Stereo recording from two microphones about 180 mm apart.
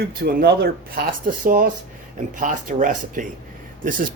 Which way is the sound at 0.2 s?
60° right (ahead or behind).